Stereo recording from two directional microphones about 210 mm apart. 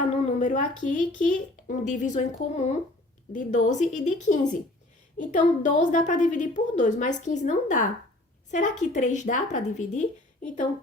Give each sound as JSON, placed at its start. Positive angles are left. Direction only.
{"t": 0.0, "sound": "a woman's voice", "side_deg": 35}